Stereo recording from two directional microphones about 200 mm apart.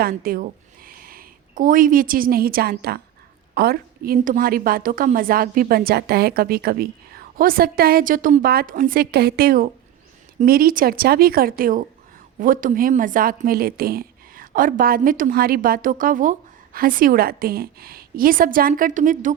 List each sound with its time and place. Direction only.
0.0 s a woman's voice: 50° right (ahead or behind)